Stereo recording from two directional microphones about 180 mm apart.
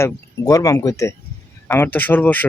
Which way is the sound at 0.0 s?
20° left (ahead or behind).